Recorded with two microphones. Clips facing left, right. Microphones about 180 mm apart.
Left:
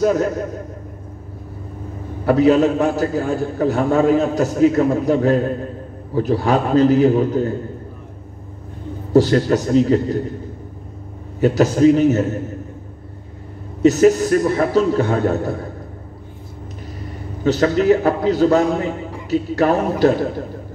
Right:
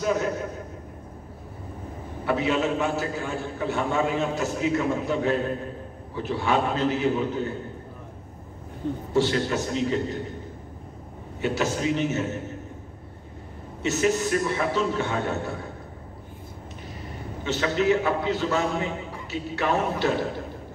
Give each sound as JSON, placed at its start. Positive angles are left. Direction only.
{"t": 0.0, "sound": "a man's voice", "side_deg": 40}
{"t": 2.2, "sound": "a man's voice", "side_deg": 40}
{"t": 9.1, "sound": "a man's voice", "side_deg": 40}
{"t": 11.3, "sound": "a man's voice", "side_deg": 40}
{"t": 13.8, "sound": "a man's voice", "side_deg": 40}
{"t": 17.4, "sound": "a man's voice", "side_deg": 40}